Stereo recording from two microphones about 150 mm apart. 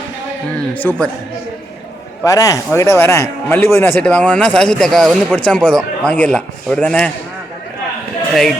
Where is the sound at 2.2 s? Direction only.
20° left (ahead or behind).